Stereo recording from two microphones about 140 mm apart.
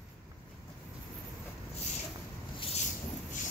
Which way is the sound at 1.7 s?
50° left (ahead or behind).